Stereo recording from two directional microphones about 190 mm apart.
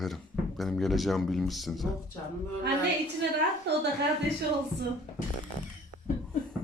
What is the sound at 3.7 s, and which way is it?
Speech, 60° right (ahead or behind).